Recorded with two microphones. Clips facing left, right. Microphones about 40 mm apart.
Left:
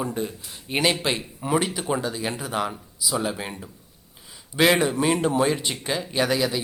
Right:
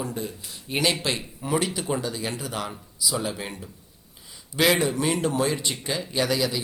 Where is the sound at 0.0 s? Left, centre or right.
Left.